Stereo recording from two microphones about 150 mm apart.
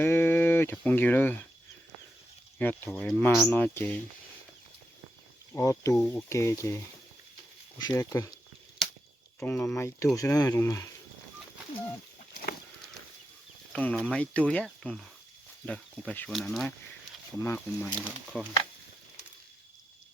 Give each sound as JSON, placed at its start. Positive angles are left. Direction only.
{"t": 0.0, "sound": "speech", "side_deg": 15}
{"t": 2.6, "sound": "speech", "side_deg": 10}
{"t": 5.5, "sound": "speech", "side_deg": 20}
{"t": 7.9, "sound": "speech", "side_deg": 25}
{"t": 9.4, "sound": "speech", "side_deg": 15}
{"t": 13.7, "sound": "speech", "side_deg": 5}
{"t": 17.4, "sound": "speech", "side_deg": 15}